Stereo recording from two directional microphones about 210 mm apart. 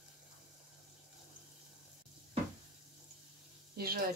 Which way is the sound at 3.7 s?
45° right (ahead or behind).